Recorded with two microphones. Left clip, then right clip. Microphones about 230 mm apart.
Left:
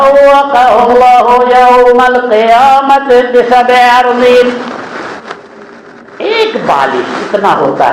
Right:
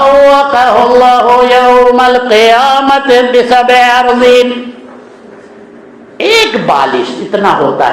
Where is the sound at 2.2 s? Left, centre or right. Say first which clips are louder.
Even; right.